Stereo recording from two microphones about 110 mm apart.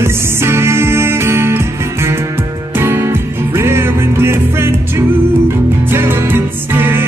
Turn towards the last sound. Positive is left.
turn(degrees=-20)  # may be behind; listen again after turning